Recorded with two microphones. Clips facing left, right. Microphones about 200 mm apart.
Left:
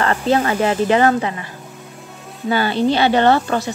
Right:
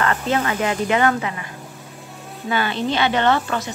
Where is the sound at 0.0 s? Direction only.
30° left (ahead or behind).